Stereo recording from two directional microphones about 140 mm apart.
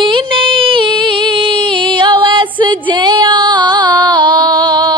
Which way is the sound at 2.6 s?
35° right (ahead or behind).